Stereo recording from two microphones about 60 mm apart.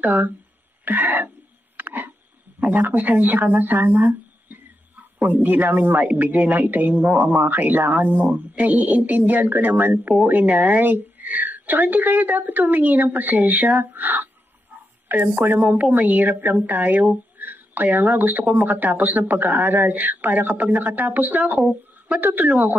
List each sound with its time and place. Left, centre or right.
0.0 s a woman's voice: right
1.8 s a sound: right
2.6 s a woman's voice: right